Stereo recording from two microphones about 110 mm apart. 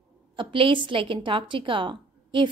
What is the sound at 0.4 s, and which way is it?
A woman's voice, 50° right (ahead or behind).